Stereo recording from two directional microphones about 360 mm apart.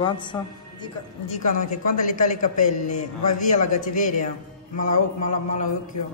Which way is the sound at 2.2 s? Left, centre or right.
Left.